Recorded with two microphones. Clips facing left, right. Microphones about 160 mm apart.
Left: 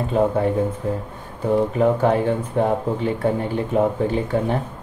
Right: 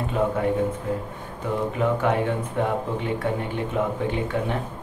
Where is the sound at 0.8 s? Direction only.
35° left (ahead or behind).